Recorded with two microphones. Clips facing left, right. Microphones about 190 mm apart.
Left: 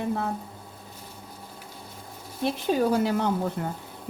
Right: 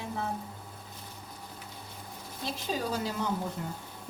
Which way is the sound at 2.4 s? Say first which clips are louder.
Left 10 dB; 60° left (ahead or behind).